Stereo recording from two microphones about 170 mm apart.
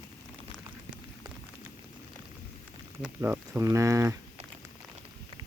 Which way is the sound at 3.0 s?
10° right (ahead or behind).